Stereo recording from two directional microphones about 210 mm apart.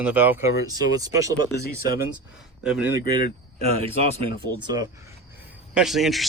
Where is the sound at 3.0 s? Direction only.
20° right (ahead or behind).